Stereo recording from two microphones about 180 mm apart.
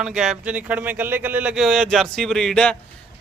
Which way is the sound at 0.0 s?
5° right (ahead or behind).